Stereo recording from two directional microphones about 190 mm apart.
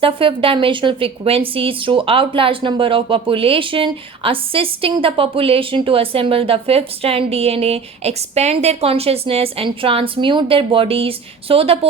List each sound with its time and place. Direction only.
0.0 s a woman's voice: 30° right (ahead or behind)